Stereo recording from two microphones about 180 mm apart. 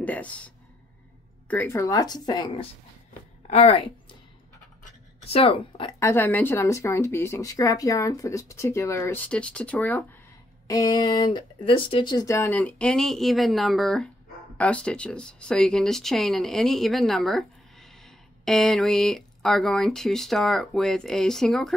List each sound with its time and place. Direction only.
0.0 s speech: 10° left (ahead or behind)
1.5 s a woman's voice: 10° left (ahead or behind)
3.4 s speech: 35° left (ahead or behind)
5.2 s speech: 30° left (ahead or behind)
5.9 s speech: 15° left (ahead or behind)
10.7 s speech: 20° left (ahead or behind); by 21.7 s 5° left (ahead or behind)